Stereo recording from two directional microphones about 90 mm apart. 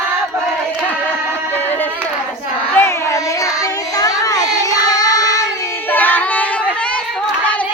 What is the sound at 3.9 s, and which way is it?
Child singing, 40° left (ahead or behind).